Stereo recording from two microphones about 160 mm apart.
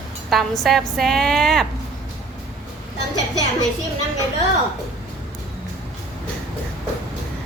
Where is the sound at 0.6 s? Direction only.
Centre (ahead or behind).